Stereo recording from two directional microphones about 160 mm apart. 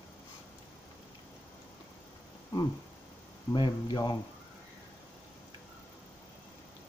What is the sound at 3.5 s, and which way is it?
Speech, 30° left (ahead or behind).